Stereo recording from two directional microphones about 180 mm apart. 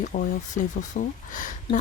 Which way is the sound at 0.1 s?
45° left (ahead or behind).